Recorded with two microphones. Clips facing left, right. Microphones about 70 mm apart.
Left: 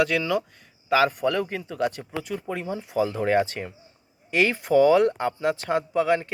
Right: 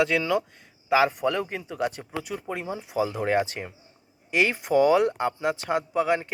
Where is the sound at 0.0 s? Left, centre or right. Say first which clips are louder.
Even; right.